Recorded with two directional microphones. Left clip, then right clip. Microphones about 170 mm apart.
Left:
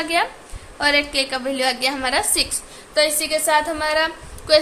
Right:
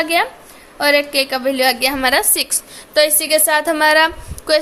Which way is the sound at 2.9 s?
55° right (ahead or behind).